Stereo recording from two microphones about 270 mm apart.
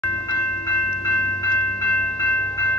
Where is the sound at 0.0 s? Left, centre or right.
Centre.